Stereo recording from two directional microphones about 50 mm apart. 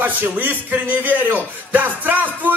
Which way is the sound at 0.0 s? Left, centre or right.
Right.